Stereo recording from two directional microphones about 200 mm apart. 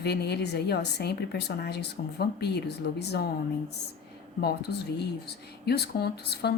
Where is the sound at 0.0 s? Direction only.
55° left (ahead or behind).